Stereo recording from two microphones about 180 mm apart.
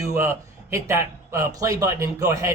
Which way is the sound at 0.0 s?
15° right (ahead or behind).